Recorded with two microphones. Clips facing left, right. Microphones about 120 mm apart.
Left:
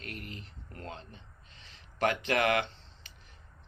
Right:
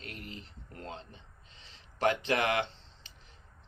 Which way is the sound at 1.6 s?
30° right (ahead or behind).